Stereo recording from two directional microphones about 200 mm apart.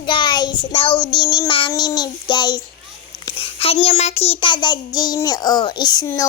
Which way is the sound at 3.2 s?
25° left (ahead or behind).